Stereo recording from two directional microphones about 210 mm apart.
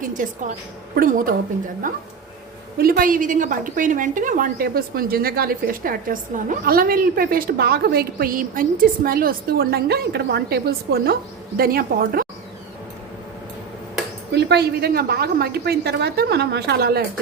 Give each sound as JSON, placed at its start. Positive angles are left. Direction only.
{"t": 0.0, "sound": "a woman's voice", "side_deg": -40}
{"t": 14.3, "sound": "a woman's voice", "side_deg": -55}